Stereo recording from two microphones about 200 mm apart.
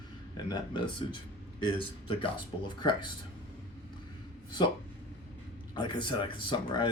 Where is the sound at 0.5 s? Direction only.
20° left (ahead or behind).